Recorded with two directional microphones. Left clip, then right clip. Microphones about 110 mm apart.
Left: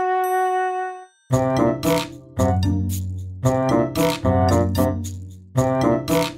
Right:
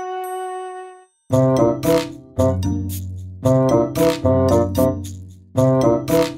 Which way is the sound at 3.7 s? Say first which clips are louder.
Right 3 dB; 30° left (ahead or behind).